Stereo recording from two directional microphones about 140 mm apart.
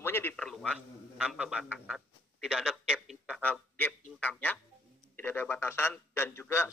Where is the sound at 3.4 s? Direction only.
10° left (ahead or behind).